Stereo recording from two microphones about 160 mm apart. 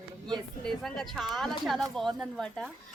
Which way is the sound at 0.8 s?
Centre (ahead or behind).